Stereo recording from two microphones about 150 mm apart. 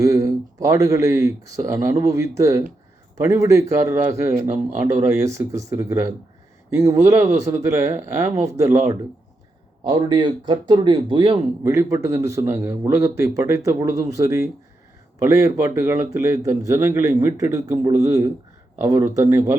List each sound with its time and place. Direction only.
0.0 s speech: 20° right (ahead or behind)
9.8 s a man's voice: 30° right (ahead or behind)
11.6 s speech: 20° right (ahead or behind)